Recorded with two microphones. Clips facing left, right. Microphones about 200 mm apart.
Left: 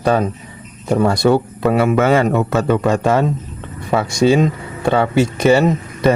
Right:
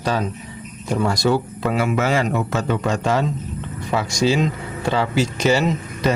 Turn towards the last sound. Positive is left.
turn(degrees=55)  # may be behind; listen again after turning